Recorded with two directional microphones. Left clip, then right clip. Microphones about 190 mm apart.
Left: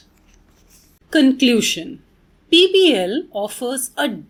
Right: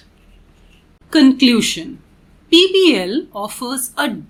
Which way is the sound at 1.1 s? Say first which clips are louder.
Right 3 dB; 10° left (ahead or behind).